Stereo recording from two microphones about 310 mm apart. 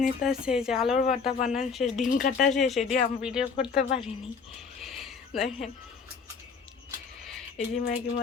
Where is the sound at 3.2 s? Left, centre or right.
Centre.